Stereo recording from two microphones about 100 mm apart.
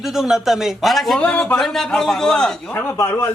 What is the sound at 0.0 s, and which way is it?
A man's voice, 5° right (ahead or behind).